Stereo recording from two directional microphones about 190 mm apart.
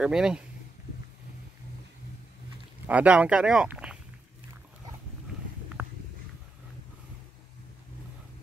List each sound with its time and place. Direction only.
0.0 s speech: 5° right (ahead or behind)
2.9 s speech: 5° right (ahead or behind)
5.8 s a sound: 10° right (ahead or behind)